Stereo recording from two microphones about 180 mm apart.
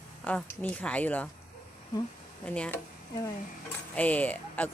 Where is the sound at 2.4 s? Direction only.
5° left (ahead or behind).